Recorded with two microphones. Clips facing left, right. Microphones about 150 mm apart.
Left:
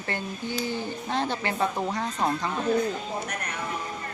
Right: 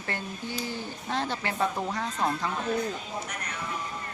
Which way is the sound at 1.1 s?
Centre (ahead or behind).